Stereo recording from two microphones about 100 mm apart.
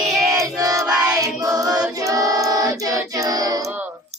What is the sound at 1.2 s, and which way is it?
Choir, 35° right (ahead or behind).